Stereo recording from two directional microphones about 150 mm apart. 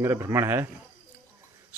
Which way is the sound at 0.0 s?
20° right (ahead or behind).